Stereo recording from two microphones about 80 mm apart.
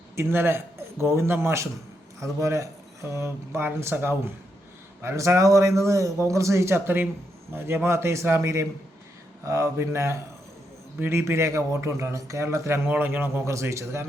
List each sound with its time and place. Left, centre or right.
0.2 s a man's voice: right